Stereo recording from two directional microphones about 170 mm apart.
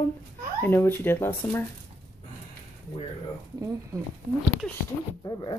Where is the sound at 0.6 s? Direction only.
15° left (ahead or behind).